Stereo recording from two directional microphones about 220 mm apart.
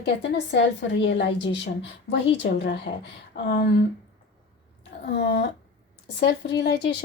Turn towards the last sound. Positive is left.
turn(degrees=50)  # may be behind; listen again after turning